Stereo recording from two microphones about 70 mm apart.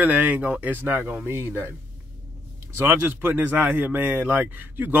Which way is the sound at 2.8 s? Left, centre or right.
Right.